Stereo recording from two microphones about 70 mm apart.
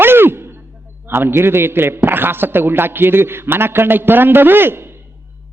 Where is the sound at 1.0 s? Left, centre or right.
Right.